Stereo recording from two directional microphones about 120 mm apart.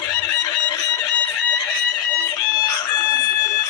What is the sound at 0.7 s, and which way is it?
Music, 35° left (ahead or behind).